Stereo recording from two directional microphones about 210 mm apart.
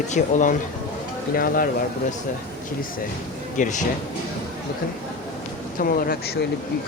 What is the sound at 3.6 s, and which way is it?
Speech, 35° left (ahead or behind).